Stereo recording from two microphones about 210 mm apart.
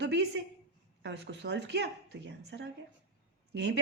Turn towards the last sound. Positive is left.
turn(degrees=-55)  # may be behind; listen again after turning